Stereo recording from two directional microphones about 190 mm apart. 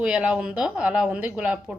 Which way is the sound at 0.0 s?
5° right (ahead or behind).